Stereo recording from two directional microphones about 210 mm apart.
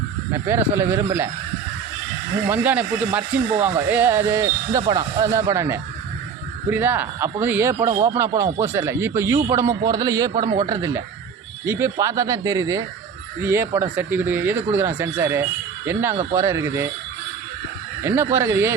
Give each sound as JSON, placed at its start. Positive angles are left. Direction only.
{"t": 0.3, "sound": "speech", "side_deg": -10}
{"t": 2.5, "sound": "speech", "side_deg": -5}
{"t": 18.0, "sound": "speech", "side_deg": -10}